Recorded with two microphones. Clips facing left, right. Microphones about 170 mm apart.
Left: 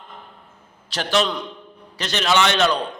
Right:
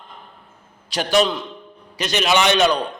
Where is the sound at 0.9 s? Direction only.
15° right (ahead or behind).